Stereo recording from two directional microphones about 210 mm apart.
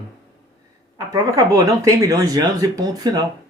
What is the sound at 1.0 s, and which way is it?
Speech, 15° right (ahead or behind).